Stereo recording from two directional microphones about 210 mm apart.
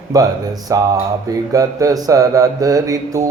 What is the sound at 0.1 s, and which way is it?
Mantra, 15° right (ahead or behind).